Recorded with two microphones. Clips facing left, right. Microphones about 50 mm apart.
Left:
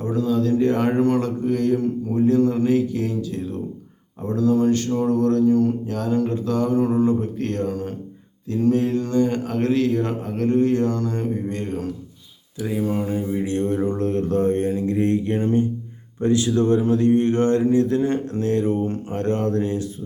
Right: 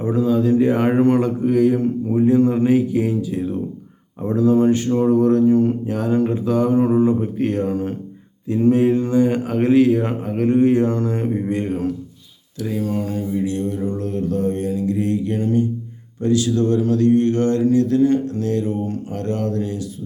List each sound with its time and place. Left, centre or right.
0.0 s speech: centre
12.5 s mantra: centre; by 15.6 s left
16.2 s speech: left
18.9 s mantra: left